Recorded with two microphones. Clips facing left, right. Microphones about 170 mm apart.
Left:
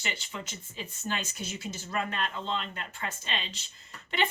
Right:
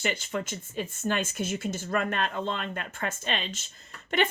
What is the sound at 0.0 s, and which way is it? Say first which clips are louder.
Speech: right 8 dB; 45° right (ahead or behind).